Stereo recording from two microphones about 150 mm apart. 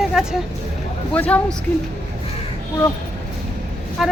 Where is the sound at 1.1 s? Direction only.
10° left (ahead or behind).